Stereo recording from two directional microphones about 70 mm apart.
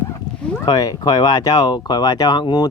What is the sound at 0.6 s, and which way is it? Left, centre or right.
Speech, left.